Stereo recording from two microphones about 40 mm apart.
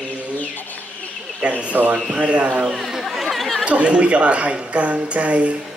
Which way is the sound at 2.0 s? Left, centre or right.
Right.